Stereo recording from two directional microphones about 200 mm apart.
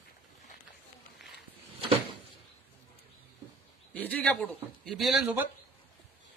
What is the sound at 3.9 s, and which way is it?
Speech, 5° left (ahead or behind).